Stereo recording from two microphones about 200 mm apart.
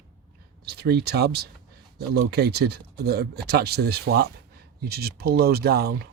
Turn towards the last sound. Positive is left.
turn(degrees=-50)  # may be behind; listen again after turning